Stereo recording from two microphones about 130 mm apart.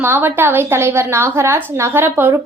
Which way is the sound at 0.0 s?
15° right (ahead or behind).